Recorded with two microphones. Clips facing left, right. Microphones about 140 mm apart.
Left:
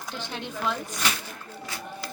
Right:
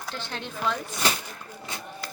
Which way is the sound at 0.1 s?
15° left (ahead or behind).